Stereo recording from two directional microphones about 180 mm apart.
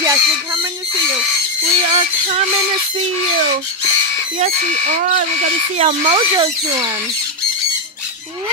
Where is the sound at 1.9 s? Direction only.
30° right (ahead or behind).